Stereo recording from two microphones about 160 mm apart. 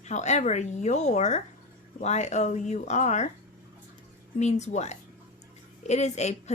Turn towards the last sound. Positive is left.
turn(degrees=45)  # may be behind; listen again after turning